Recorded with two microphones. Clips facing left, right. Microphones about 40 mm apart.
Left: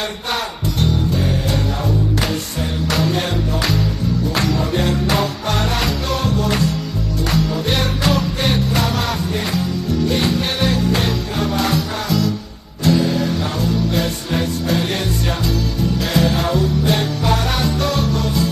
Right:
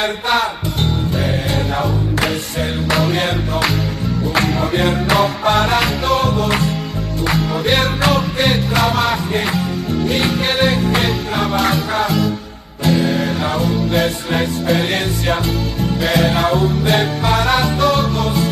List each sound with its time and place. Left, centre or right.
2.9 s music: right